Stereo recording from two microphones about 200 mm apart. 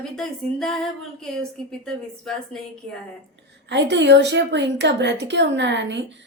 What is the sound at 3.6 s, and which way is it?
A woman's voice, 60° right (ahead or behind).